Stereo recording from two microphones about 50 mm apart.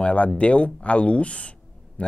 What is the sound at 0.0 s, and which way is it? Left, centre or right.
Speech, left.